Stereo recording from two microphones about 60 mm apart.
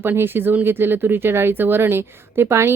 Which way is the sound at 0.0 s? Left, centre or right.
Right.